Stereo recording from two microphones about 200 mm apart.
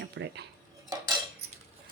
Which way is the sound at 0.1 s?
60° right (ahead or behind).